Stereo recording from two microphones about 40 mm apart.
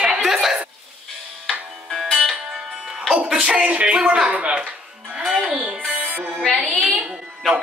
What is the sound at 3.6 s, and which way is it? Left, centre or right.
Speech, right.